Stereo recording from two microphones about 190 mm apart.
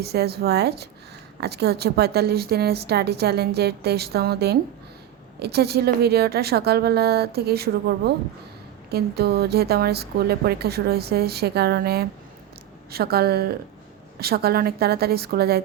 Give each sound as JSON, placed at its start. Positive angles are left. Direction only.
{"t": 0.0, "sound": "a woman's voice", "side_deg": -60}